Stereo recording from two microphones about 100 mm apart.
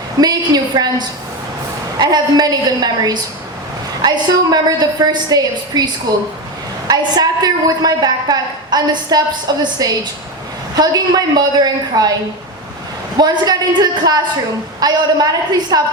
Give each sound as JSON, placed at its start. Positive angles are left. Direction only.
{"t": 0.2, "sound": "a woman's voice", "side_deg": -40}
{"t": 13.1, "sound": "a woman's voice", "side_deg": -45}